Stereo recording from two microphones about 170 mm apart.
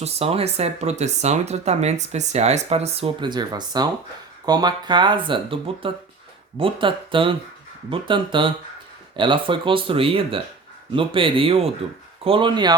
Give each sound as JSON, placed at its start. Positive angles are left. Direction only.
{"t": 0.0, "sound": "speech", "side_deg": -35}